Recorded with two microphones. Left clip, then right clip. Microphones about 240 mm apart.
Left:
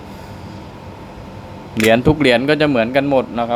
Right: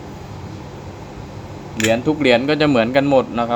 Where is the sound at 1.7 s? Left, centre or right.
Left; by 3.5 s centre.